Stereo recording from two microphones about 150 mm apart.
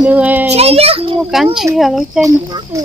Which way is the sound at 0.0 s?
10° right (ahead or behind).